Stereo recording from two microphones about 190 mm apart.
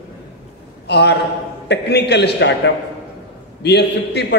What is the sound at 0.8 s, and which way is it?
A man's voice, 60° left (ahead or behind).